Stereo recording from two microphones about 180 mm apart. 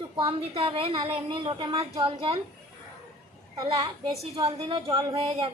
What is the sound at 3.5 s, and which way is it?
A woman's voice, 20° right (ahead or behind).